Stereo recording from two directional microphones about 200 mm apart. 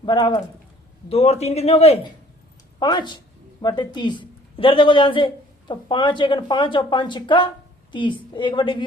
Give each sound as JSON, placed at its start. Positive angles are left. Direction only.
{"t": 0.0, "sound": "a man's voice", "side_deg": 20}